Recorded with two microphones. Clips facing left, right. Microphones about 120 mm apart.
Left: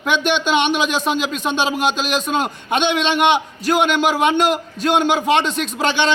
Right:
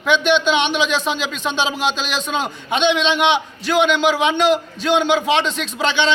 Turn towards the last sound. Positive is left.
turn(degrees=50)  # may be behind; listen again after turning